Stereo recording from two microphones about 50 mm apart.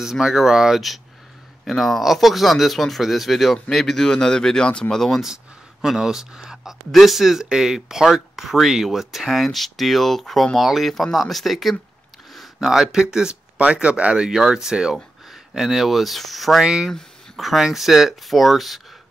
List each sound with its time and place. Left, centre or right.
0.0 s a man's voice: centre
4.9 s a man's voice: centre
5.2 s speech: centre
6.9 s speech: centre
16.6 s speech: centre
17.4 s speech: centre